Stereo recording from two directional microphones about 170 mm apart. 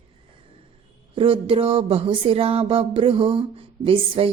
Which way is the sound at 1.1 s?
30° right (ahead or behind).